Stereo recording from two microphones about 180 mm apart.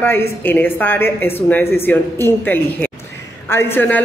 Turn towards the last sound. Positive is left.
turn(degrees=10)  # may be behind; listen again after turning